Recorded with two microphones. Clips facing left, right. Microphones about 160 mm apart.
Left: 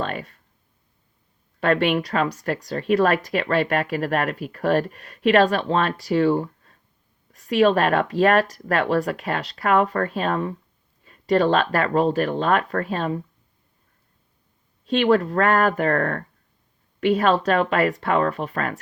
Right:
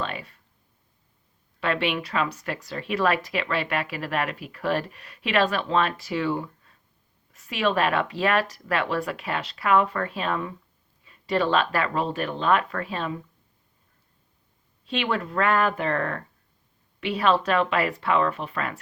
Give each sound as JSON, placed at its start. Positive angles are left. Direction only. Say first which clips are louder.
{"t": 0.0, "sound": "a sound", "louder": "left 4 dB", "side_deg": 45}
{"t": 1.6, "sound": "speech", "louder": "left 6 dB", "side_deg": 45}
{"t": 14.8, "sound": "speech", "louder": "left 9 dB", "side_deg": 45}